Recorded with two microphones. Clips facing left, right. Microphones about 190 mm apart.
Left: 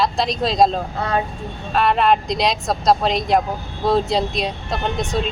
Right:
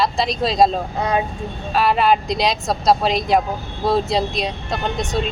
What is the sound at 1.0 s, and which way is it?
Speech, 15° right (ahead or behind).